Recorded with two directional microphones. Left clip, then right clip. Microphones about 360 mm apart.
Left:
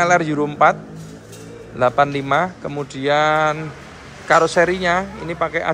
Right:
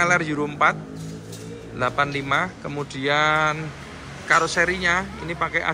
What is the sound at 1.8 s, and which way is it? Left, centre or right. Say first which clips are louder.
Speech: left 7 dB; centre.